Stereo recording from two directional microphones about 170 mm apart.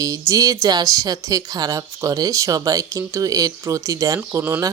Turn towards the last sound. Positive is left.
turn(degrees=-15)  # may be behind; listen again after turning